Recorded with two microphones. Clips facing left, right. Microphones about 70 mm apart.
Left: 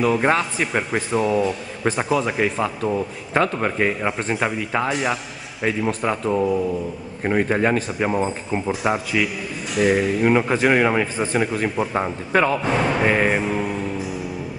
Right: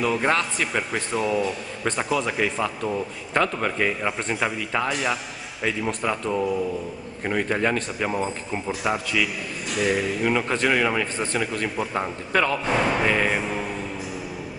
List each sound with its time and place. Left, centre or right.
0.0 s speech: centre
11.5 s speech: centre
12.4 s speech: centre
13.0 s music: centre
13.4 s speech: centre